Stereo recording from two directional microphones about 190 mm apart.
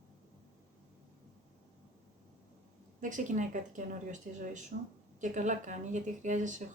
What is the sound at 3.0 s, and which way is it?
Speech, 40° right (ahead or behind).